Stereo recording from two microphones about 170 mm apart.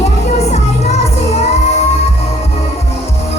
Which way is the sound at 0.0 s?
40° left (ahead or behind).